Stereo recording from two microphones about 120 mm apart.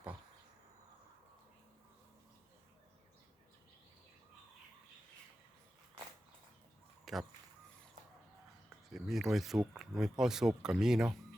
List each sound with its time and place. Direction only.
7.0 s fowl: centre (ahead or behind)
8.9 s speech: centre (ahead or behind)